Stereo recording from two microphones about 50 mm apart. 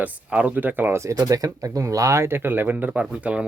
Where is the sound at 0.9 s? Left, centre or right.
Right.